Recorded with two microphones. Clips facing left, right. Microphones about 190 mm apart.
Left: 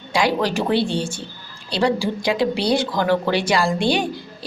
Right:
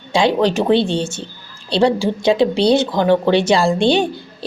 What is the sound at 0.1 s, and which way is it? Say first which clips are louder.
Speech: right 5 dB; 25° right (ahead or behind).